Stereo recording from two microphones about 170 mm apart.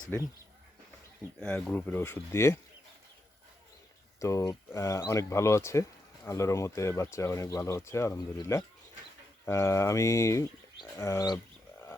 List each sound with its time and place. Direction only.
0.1 s speech: 10° left (ahead or behind)
1.4 s speech: 5° left (ahead or behind)
4.2 s speech: 20° left (ahead or behind)